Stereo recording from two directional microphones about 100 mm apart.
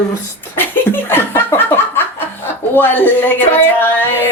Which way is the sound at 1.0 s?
25° left (ahead or behind).